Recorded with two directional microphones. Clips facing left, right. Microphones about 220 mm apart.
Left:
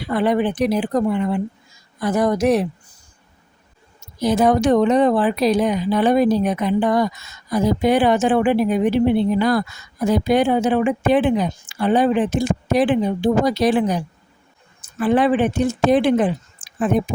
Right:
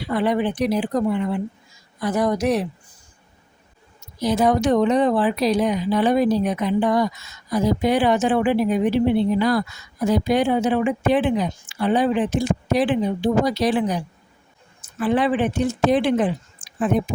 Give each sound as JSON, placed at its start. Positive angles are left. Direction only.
{"t": 0.1, "sound": "speech", "side_deg": 50}
{"t": 4.2, "sound": "speech", "side_deg": 50}
{"t": 15.0, "sound": "speech", "side_deg": 50}